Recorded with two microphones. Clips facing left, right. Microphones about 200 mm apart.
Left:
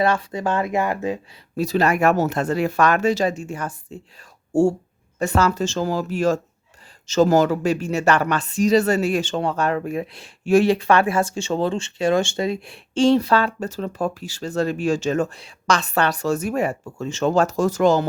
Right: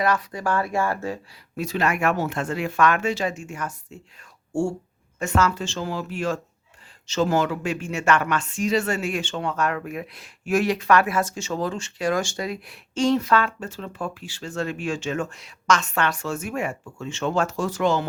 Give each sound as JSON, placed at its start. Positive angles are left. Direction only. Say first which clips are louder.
{"t": 0.0, "sound": "speech", "louder": "left 3 dB", "side_deg": 25}
{"t": 1.5, "sound": "speech", "louder": "left 5 dB", "side_deg": 35}